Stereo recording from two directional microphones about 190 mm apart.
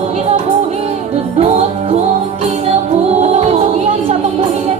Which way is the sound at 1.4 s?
35° right (ahead or behind).